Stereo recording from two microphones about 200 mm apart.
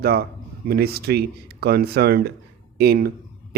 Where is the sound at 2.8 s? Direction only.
50° right (ahead or behind).